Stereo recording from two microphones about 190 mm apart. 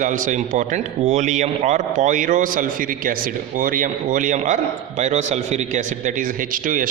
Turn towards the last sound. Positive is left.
turn(degrees=-45)  # may be behind; listen again after turning